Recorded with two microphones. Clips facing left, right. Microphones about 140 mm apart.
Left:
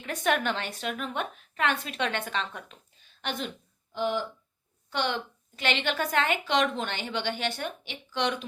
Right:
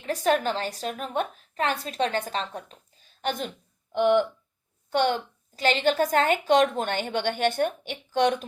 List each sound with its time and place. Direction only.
0.0 s a woman's voice: 35° right (ahead or behind)
3.9 s speech: 60° right (ahead or behind)
4.9 s a woman's voice: 45° right (ahead or behind)